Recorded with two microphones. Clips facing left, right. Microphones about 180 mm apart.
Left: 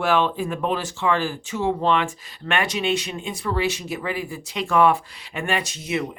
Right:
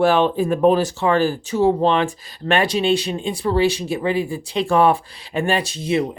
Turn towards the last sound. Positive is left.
turn(degrees=-30)  # may be behind; listen again after turning